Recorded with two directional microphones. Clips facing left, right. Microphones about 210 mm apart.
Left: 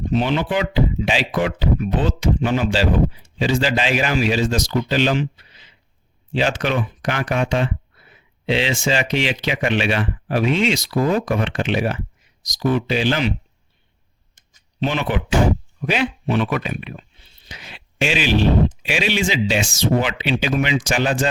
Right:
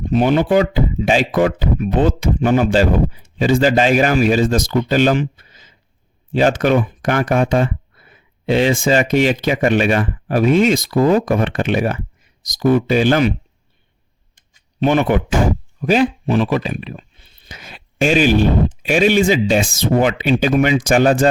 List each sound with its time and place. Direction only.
0.1 s speech: 50° right (ahead or behind)
14.8 s speech: 50° right (ahead or behind); by 17.1 s 35° right (ahead or behind)
17.4 s speech: 50° right (ahead or behind)